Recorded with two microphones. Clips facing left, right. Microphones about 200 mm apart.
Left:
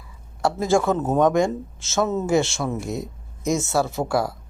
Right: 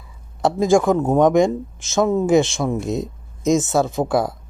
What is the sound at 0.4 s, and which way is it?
Speech, 15° right (ahead or behind).